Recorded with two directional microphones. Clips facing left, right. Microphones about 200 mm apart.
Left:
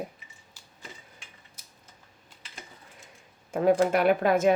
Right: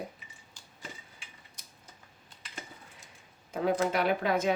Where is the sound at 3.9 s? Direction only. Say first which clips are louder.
Left 6 dB; 50° left (ahead or behind).